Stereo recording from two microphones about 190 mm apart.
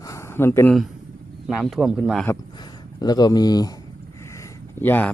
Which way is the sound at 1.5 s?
Centre (ahead or behind).